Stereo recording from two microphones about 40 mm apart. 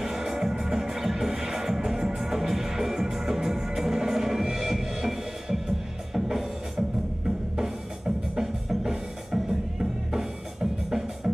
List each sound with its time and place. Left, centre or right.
0.0 s music: centre